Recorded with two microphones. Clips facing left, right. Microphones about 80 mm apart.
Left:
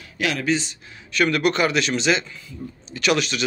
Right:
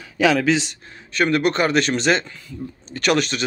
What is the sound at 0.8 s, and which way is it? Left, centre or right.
Speech, right.